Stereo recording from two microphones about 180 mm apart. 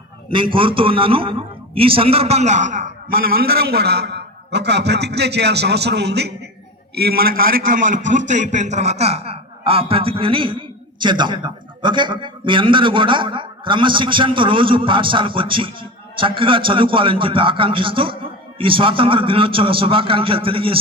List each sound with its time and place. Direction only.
0.5 s a man's voice: 30° right (ahead or behind)